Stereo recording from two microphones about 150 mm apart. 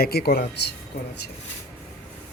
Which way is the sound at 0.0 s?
90° left.